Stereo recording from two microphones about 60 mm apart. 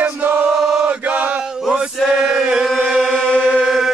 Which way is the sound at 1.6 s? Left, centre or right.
Centre.